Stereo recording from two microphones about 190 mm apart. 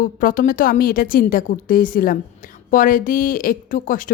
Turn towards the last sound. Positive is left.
turn(degrees=45)  # may be behind; listen again after turning